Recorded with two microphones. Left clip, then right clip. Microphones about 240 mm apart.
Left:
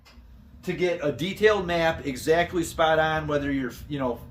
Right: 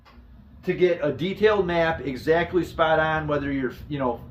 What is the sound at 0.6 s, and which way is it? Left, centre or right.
Speech, centre.